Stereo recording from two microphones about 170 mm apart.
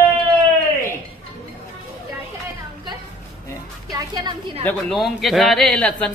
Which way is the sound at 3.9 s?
20° right (ahead or behind).